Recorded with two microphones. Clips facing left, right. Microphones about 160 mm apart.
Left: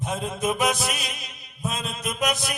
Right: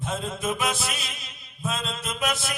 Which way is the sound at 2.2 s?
20° left (ahead or behind).